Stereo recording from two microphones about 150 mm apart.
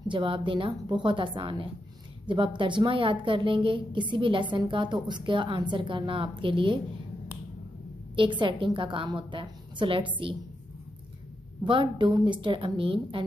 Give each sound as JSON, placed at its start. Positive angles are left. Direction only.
{"t": 0.1, "sound": "a woman's voice", "side_deg": -35}
{"t": 8.4, "sound": "a woman's voice", "side_deg": -35}
{"t": 11.6, "sound": "a woman's voice", "side_deg": -35}